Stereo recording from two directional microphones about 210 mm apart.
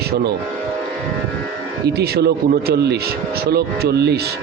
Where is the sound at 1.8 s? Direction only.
50° right (ahead or behind).